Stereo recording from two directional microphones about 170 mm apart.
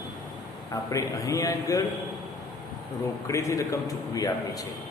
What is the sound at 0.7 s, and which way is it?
A man's voice, 20° left (ahead or behind).